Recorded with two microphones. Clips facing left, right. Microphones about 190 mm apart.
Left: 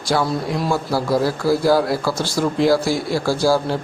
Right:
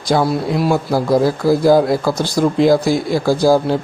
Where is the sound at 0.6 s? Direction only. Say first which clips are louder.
Right 5 dB; 20° right (ahead or behind).